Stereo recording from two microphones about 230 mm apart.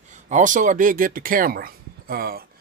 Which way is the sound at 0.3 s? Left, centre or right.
Right.